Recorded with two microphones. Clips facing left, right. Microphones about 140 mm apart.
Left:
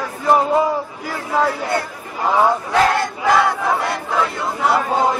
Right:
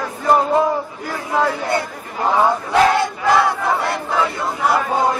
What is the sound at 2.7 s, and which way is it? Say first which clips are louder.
Battle cry: right 2 dB; 5° right (ahead or behind).